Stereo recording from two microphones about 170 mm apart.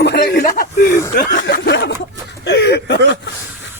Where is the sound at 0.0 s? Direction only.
80° left.